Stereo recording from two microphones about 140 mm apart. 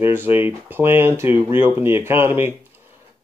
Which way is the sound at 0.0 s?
15° right (ahead or behind).